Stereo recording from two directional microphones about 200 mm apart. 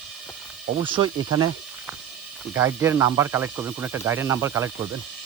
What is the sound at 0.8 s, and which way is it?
Speech, 25° right (ahead or behind).